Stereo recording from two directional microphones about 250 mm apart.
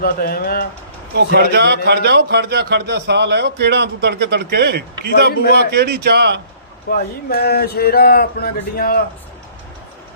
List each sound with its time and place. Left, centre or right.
0.0 s speech: left
1.1 s a man's voice: right
6.9 s speech: left